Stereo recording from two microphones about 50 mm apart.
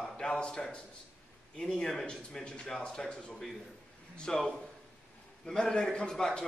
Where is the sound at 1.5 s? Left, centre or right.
Centre.